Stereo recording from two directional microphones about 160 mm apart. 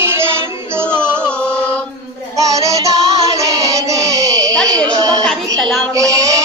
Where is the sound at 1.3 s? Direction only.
5° left (ahead or behind).